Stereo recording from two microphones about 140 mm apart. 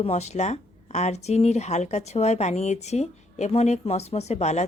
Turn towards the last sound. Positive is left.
turn(degrees=55)  # may be behind; listen again after turning